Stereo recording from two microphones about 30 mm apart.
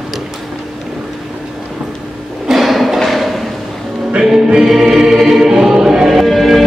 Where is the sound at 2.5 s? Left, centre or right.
Centre.